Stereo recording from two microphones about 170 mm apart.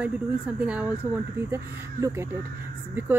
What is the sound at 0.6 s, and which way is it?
Speech, 5° right (ahead or behind).